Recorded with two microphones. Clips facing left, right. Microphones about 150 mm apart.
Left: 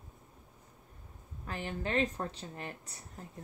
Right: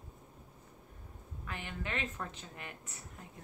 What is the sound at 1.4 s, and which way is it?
A woman's voice, 35° left (ahead or behind).